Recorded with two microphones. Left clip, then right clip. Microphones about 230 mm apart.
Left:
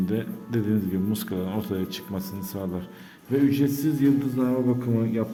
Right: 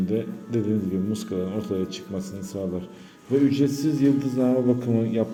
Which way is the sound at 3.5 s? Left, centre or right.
Centre.